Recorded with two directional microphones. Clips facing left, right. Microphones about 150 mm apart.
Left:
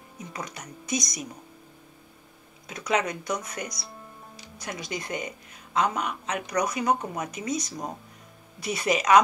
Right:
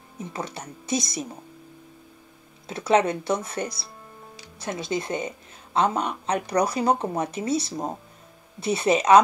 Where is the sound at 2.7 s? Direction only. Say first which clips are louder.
Right 6 dB; 30° right (ahead or behind).